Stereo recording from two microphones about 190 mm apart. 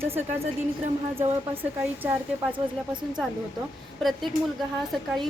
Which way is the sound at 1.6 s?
10° right (ahead or behind).